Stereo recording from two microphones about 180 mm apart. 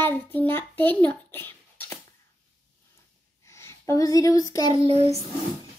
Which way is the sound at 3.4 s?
15° left (ahead or behind).